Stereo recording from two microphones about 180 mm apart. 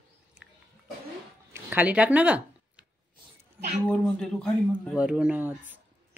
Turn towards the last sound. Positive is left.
turn(degrees=-10)  # may be behind; listen again after turning